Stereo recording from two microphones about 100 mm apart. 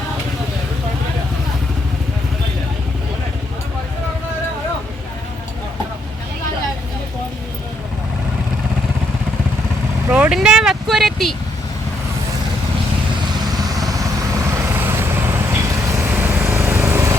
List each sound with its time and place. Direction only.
10.1 s vehicle: 15° right (ahead or behind)
10.3 s a sound: 5° right (ahead or behind)
13.8 s vehicle: 35° right (ahead or behind)